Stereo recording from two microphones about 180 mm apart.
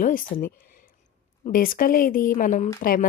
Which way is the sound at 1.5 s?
50° left (ahead or behind).